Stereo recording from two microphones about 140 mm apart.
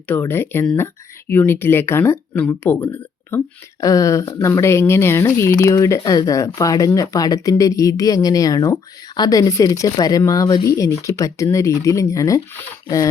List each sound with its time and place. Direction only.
0.1 s speech: 15° left (ahead or behind)